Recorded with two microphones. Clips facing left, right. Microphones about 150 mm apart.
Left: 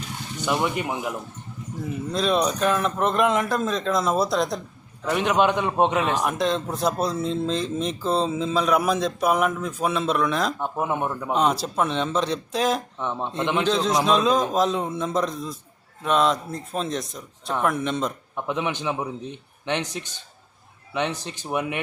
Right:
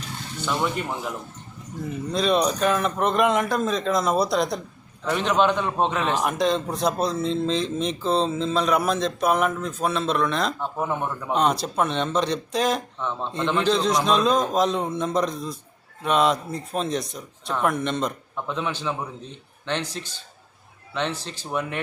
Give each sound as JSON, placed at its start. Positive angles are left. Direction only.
{"t": 0.3, "sound": "speech", "side_deg": 15}
{"t": 1.8, "sound": "speech", "side_deg": 0}
{"t": 5.0, "sound": "speech", "side_deg": 10}
{"t": 6.2, "sound": "speech", "side_deg": 0}
{"t": 11.3, "sound": "speech", "side_deg": 5}
{"t": 13.0, "sound": "speech", "side_deg": 15}
{"t": 13.6, "sound": "speech", "side_deg": 0}
{"t": 18.4, "sound": "speech", "side_deg": 15}